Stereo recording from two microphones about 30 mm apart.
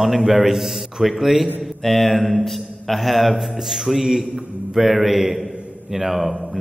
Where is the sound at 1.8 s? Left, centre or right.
Centre.